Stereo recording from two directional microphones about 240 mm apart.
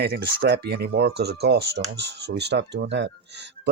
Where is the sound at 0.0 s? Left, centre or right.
Right.